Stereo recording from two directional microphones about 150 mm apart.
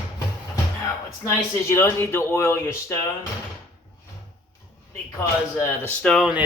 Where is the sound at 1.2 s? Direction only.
15° left (ahead or behind).